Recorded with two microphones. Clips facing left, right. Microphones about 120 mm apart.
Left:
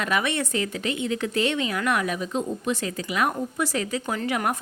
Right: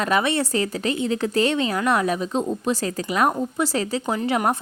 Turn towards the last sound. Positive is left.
turn(degrees=-30)  # may be behind; listen again after turning